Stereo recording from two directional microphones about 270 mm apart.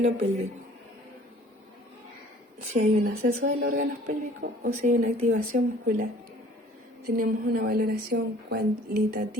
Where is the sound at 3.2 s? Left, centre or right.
Right.